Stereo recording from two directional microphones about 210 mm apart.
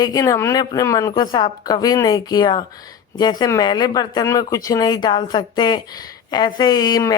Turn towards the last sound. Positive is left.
turn(degrees=20)  # may be behind; listen again after turning